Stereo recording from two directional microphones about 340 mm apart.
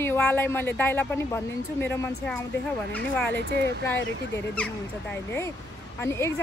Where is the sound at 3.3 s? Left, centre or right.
Right.